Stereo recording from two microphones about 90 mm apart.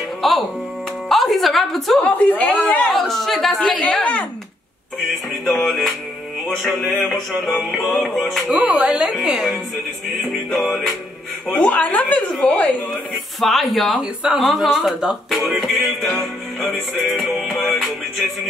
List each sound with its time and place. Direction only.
0.2 s music: centre (ahead or behind)
1.0 s a woman's voice: centre (ahead or behind)
2.0 s a woman's voice: 15° left (ahead or behind)
2.9 s speech: centre (ahead or behind)
3.8 s a woman's voice: 15° left (ahead or behind)
5.4 s speech: 5° left (ahead or behind)
8.5 s speech: 15° right (ahead or behind); by 11.0 s centre (ahead or behind)
11.5 s a woman's voice: 15° left (ahead or behind)